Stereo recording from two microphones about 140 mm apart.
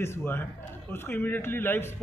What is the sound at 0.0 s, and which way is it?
Speech, 15° left (ahead or behind).